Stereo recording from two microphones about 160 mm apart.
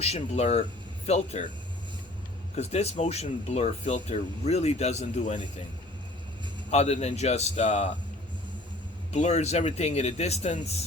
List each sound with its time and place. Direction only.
0.0 s speech: 40° left (ahead or behind)
2.6 s speech: 40° left (ahead or behind)
6.7 s speech: 40° left (ahead or behind)
9.1 s speech: 45° left (ahead or behind)